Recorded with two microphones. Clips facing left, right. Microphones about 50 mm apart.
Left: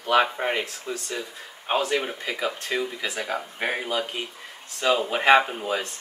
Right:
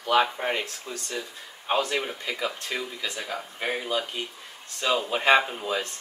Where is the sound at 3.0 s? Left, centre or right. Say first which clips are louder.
Left 4 dB; left.